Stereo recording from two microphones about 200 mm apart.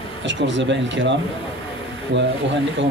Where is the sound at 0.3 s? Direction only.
65° right (ahead or behind).